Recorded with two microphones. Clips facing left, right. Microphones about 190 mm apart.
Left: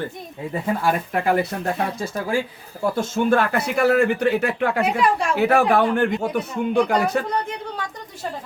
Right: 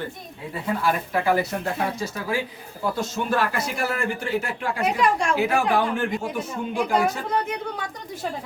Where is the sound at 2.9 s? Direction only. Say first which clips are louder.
Left 6 dB; 55° left (ahead or behind).